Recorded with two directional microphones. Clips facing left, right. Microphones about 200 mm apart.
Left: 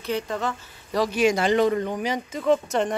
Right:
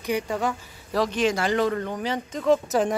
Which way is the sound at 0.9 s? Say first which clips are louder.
Left 2 dB; 5° left (ahead or behind).